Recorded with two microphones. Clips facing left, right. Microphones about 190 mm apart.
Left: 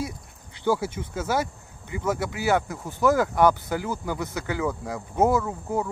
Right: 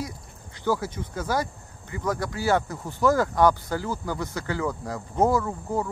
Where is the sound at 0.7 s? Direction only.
5° left (ahead or behind).